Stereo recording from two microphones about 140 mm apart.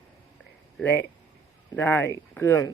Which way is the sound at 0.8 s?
15° left (ahead or behind).